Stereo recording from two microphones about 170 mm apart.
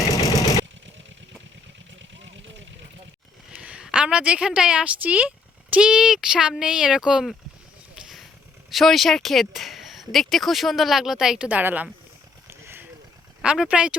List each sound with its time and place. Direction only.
0.1 s vehicle: 20° left (ahead or behind)
2.0 s vehicle: 90° right
3.5 s a woman's voice: 5° right (ahead or behind)
7.9 s vehicle: 5° right (ahead or behind)
8.7 s speech: centre (ahead or behind)
12.5 s vehicle: 15° right (ahead or behind)
13.4 s speech: 5° right (ahead or behind)